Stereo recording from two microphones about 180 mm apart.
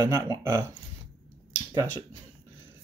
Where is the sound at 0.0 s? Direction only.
20° right (ahead or behind).